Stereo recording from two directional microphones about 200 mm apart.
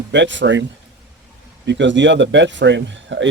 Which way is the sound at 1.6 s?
60° right (ahead or behind).